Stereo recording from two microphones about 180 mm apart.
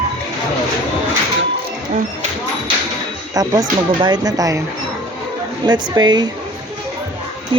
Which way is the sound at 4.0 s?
20° right (ahead or behind).